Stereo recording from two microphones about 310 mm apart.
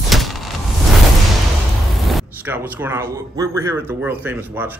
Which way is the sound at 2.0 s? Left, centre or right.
Centre.